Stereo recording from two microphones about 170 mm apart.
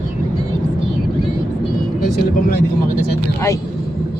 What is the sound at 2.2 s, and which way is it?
Speech, 65° left (ahead or behind).